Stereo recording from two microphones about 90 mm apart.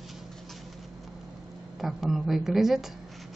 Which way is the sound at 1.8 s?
Centre (ahead or behind).